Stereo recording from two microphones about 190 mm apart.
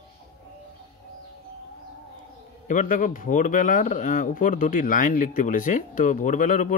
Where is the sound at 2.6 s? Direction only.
40° left (ahead or behind).